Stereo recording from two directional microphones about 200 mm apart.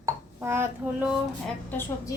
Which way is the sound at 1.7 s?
10° left (ahead or behind).